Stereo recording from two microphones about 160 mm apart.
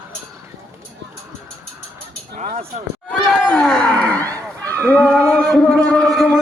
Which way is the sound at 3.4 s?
5° left (ahead or behind).